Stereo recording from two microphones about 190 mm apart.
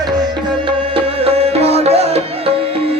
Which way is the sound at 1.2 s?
30° right (ahead or behind).